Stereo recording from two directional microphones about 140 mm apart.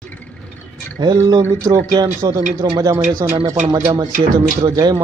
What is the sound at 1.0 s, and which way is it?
A man's voice, 30° right (ahead or behind).